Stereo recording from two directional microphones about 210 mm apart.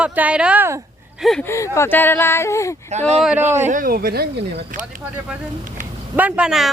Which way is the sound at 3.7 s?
40° right (ahead or behind).